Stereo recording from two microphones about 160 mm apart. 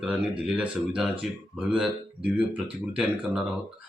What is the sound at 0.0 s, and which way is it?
Speech, 5° right (ahead or behind).